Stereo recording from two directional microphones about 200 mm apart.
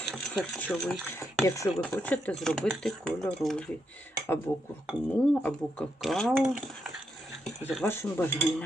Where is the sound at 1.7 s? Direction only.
5° left (ahead or behind).